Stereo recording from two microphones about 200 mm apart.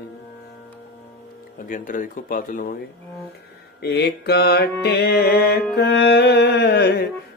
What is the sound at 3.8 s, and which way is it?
Mantra, 55° left (ahead or behind).